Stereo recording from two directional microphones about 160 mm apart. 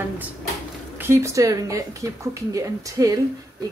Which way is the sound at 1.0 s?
15° right (ahead or behind).